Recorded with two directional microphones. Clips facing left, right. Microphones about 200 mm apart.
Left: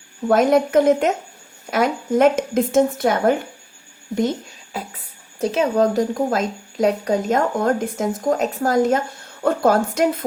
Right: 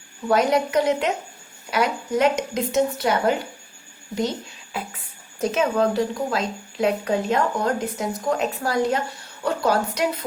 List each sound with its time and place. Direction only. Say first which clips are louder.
0.3 s a woman's voice: left 4 dB; 50° left (ahead or behind)
4.7 s a sound: left 1 dB; 40° left (ahead or behind)
5.4 s a woman's voice: left 3 dB; 35° left (ahead or behind); by 10.2 s 50° left (ahead or behind)